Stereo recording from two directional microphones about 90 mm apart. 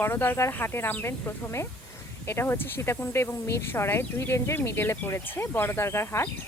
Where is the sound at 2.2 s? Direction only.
30° left (ahead or behind).